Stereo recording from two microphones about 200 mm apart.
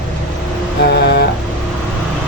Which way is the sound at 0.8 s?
55° left (ahead or behind).